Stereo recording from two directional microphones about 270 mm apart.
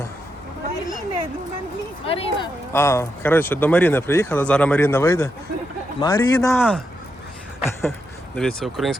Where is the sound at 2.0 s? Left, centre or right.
Left.